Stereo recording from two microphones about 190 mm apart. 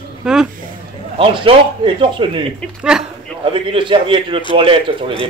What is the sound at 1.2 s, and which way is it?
A man's voice, 30° right (ahead or behind).